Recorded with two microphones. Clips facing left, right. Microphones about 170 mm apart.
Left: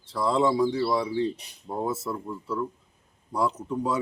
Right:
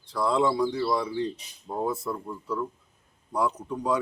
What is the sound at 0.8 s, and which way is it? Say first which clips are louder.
Speech: left 2 dB; 5° left (ahead or behind).